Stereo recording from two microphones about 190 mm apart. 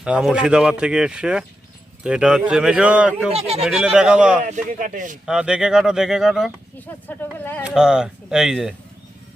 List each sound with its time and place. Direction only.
0.0 s speech: 5° right (ahead or behind)
3.3 s speech: 30° right (ahead or behind)
3.6 s speech: 5° right (ahead or behind)
4.4 s speech: 40° right (ahead or behind)
5.2 s speech: 5° right (ahead or behind)
6.7 s speech: 10° left (ahead or behind)
7.6 s speech: 5° right (ahead or behind)